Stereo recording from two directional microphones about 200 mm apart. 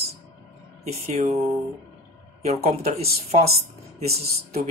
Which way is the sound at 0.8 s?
30° right (ahead or behind).